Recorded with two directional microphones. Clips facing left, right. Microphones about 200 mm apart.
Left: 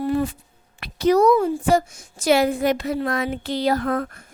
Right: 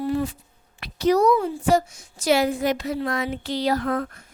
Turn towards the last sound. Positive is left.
turn(degrees=50)  # may be behind; listen again after turning